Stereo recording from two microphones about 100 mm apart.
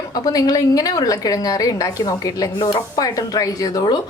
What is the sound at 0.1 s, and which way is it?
A woman's voice, 35° left (ahead or behind).